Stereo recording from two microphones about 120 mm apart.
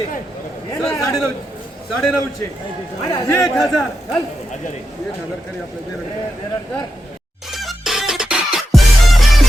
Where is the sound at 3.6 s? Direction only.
Centre (ahead or behind).